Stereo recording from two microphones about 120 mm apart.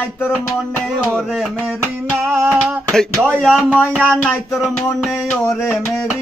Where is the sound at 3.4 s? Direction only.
Centre (ahead or behind).